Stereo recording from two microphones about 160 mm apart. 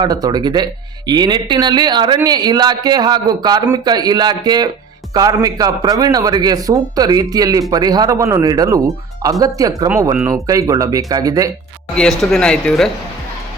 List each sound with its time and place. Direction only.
0.0 s speech: 25° right (ahead or behind)
11.9 s speech: 5° left (ahead or behind)